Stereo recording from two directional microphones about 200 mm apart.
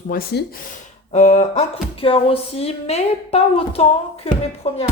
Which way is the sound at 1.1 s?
35° left (ahead or behind).